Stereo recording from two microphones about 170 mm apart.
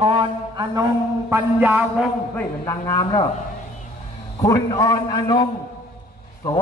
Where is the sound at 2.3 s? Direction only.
15° left (ahead or behind).